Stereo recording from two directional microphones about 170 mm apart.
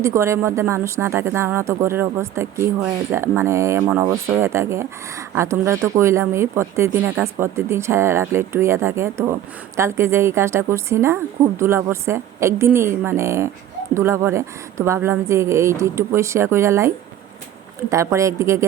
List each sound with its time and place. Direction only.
0.0 s speech: 15° right (ahead or behind)